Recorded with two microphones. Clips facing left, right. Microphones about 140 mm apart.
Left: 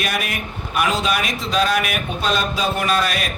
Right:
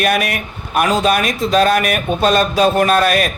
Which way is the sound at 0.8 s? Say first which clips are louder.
Right 6 dB; 45° right (ahead or behind).